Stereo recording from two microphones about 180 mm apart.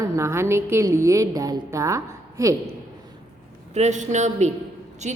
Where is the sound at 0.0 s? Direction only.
15° right (ahead or behind).